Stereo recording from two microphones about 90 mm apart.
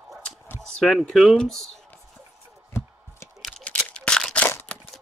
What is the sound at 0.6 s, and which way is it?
Speech, 5° left (ahead or behind).